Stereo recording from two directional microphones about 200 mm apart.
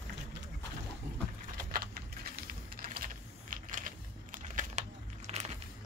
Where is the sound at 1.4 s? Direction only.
45° right (ahead or behind).